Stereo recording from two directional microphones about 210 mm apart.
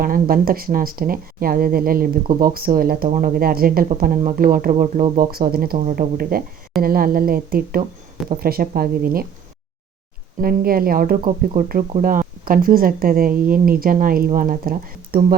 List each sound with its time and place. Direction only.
0.0 s speech: 45° right (ahead or behind)
5.7 s speech: 35° right (ahead or behind)
10.4 s speech: 45° right (ahead or behind)